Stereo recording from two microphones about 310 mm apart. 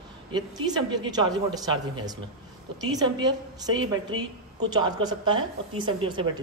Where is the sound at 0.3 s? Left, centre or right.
Centre.